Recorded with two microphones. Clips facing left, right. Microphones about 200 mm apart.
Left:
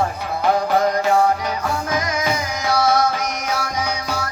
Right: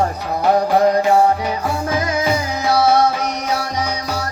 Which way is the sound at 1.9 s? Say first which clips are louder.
Right 5 dB; 30° right (ahead or behind).